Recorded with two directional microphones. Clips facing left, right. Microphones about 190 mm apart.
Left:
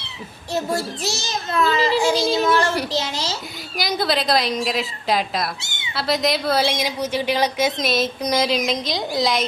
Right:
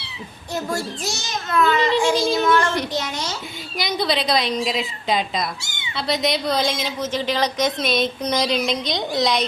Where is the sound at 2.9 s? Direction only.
25° left (ahead or behind).